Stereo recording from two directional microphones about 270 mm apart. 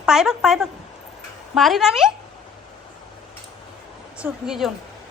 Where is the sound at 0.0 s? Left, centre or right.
Centre.